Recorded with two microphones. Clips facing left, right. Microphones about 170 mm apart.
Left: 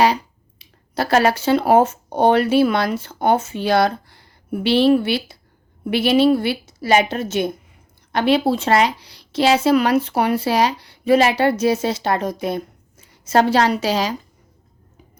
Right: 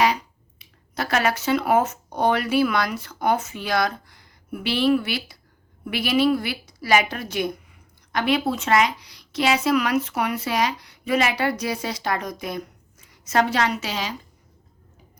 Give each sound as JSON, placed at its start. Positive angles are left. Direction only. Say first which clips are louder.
{"t": 0.6, "sound": "a woman's voice", "louder": "left 6 dB", "side_deg": 30}